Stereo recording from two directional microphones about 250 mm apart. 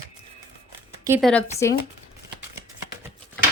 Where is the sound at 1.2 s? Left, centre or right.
Centre.